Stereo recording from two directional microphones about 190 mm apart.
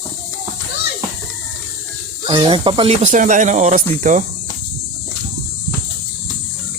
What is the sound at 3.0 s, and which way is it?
Speech, 40° right (ahead or behind).